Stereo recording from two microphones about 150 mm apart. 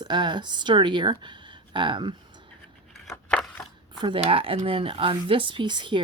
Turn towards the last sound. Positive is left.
turn(degrees=-30)  # may be behind; listen again after turning